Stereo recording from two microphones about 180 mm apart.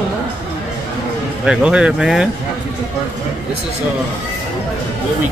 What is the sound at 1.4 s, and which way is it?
Speech, 5° right (ahead or behind).